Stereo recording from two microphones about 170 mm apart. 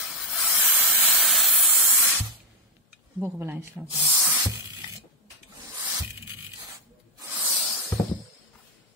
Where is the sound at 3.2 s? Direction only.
15° right (ahead or behind).